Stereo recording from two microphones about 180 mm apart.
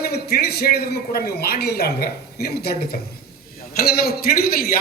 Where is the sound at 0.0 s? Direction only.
60° left (ahead or behind).